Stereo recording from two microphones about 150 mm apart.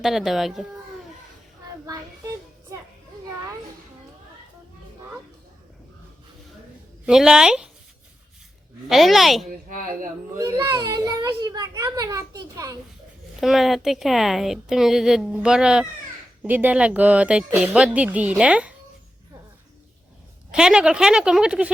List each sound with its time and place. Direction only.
0.0 s a woman's voice: centre (ahead or behind)
7.0 s a woman's voice: 5° right (ahead or behind)
8.9 s a woman's voice: centre (ahead or behind)
9.5 s speech: 65° right (ahead or behind)
10.3 s a woman's voice: 20° right (ahead or behind)
13.4 s a woman's voice: centre (ahead or behind)
20.5 s a woman's voice: 5° right (ahead or behind)